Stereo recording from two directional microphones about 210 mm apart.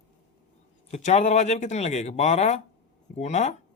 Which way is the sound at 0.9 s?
35° left (ahead or behind).